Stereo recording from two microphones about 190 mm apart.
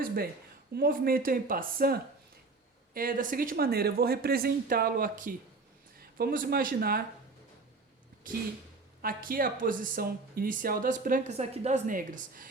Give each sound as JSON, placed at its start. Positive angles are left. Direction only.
{"t": 0.7, "sound": "speech", "side_deg": -50}
{"t": 8.2, "sound": "speech", "side_deg": -45}